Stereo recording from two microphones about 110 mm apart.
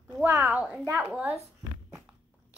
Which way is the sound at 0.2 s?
20° right (ahead or behind).